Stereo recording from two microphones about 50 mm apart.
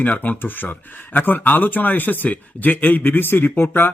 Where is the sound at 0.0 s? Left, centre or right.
Left.